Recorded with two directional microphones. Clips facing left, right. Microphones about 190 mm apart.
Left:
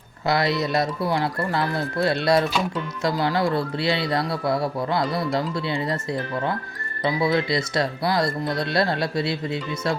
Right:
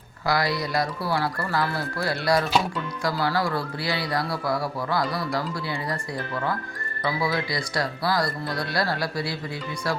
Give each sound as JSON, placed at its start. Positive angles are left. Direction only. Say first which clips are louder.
{"t": 0.3, "sound": "speech", "louder": "left 3 dB", "side_deg": 25}
{"t": 7.0, "sound": "speech", "louder": "left 5 dB", "side_deg": 20}